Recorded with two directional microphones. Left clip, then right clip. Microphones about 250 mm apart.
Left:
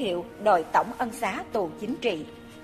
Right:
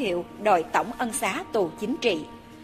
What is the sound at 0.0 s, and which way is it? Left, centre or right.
A woman's voice, right.